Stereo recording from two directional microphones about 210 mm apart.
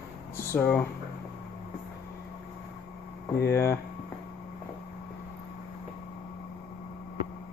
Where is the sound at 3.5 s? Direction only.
15° left (ahead or behind).